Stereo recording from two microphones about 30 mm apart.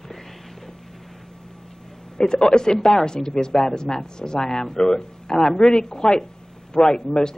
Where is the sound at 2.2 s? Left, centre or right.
Left.